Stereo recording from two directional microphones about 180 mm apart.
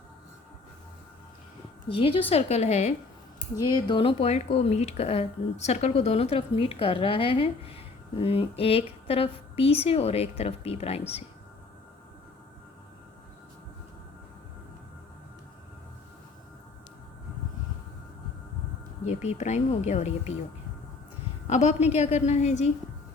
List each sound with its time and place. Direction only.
1.9 s a woman's voice: 30° left (ahead or behind)
3.5 s a woman's voice: 20° left (ahead or behind)
19.0 s a woman's voice: 40° left (ahead or behind)
21.4 s a woman's voice: 40° left (ahead or behind)